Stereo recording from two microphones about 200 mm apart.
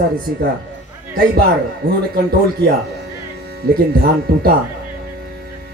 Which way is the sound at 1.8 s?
50° right (ahead or behind).